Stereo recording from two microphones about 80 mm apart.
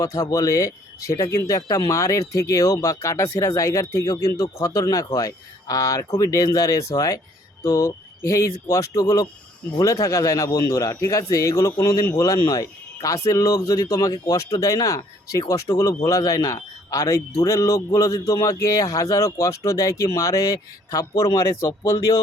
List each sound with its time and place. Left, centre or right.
0.0 s speech: left